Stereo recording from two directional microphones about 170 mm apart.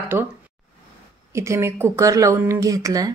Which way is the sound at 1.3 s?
15° right (ahead or behind).